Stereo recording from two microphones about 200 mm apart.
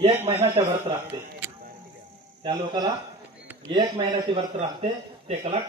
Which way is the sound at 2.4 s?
20° right (ahead or behind).